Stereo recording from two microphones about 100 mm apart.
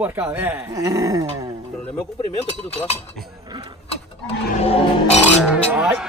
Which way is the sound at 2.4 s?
90° left.